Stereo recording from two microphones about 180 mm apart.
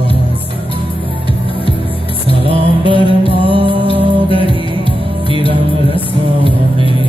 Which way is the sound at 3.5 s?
30° right (ahead or behind).